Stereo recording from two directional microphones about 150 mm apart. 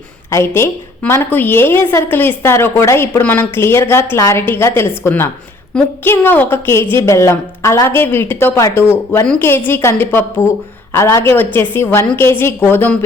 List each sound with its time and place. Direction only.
0.3 s a woman's voice: 20° left (ahead or behind)